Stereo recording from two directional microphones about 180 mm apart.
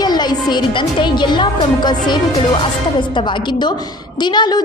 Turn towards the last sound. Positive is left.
turn(degrees=25)  # may be behind; listen again after turning